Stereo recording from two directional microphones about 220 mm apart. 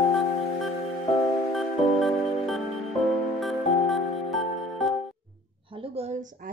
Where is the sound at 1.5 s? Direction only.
Centre (ahead or behind).